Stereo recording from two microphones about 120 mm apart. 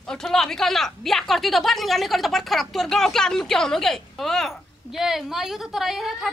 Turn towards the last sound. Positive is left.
turn(degrees=-5)  # may be behind; listen again after turning